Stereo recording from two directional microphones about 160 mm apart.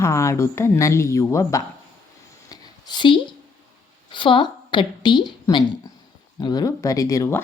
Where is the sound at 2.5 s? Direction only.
25° left (ahead or behind).